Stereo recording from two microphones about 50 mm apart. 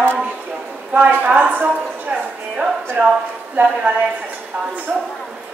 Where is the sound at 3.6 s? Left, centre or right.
Right.